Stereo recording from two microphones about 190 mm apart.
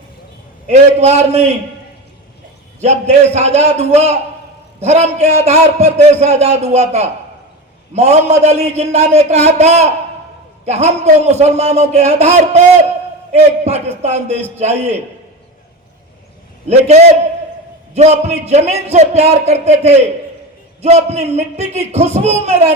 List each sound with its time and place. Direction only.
0.7 s a man's voice: 35° right (ahead or behind)
2.8 s a man's voice: 35° right (ahead or behind)
16.6 s a man's voice: 35° right (ahead or behind)